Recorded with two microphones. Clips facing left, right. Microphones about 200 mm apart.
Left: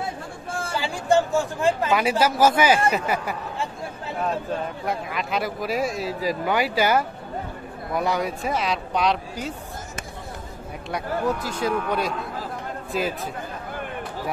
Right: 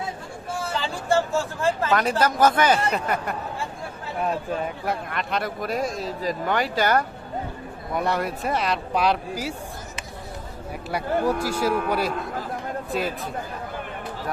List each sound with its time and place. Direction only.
0.5 s a sound: 50° left (ahead or behind)
0.7 s speech: 15° left (ahead or behind)
4.8 s speech: centre (ahead or behind)
10.9 s speech: 10° right (ahead or behind)